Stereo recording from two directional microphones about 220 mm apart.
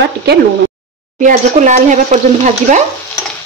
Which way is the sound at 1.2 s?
35° right (ahead or behind).